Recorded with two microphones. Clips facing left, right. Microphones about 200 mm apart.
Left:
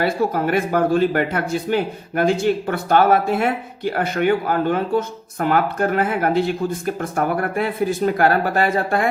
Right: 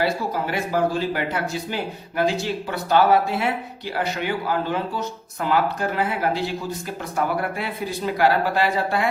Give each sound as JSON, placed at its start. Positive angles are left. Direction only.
{"t": 0.0, "sound": "speech", "side_deg": 55}